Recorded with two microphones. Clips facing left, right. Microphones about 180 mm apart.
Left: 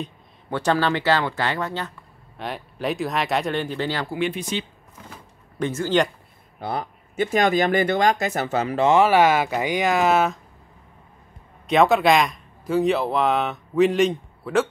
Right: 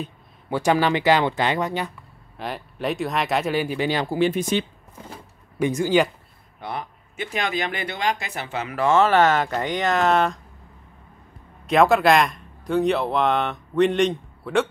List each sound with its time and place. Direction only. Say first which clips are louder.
0.0 s speech: even; 10° right (ahead or behind)
2.3 s speech: even; centre (ahead or behind)
4.1 s speech: right 5 dB; 40° right (ahead or behind)
5.6 s speech: right 2 dB; 15° right (ahead or behind)
6.6 s speech: left 3 dB; 35° left (ahead or behind)
8.7 s speech: left 1 dB; 15° left (ahead or behind)
11.6 s a man's voice: even; centre (ahead or behind)